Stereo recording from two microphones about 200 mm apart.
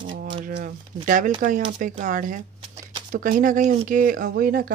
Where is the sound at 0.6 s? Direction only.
40° right (ahead or behind).